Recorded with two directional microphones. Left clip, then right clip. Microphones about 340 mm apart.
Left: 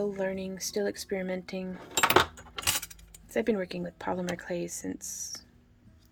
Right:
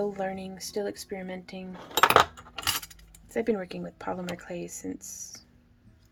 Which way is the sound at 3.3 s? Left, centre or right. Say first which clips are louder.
Even; centre.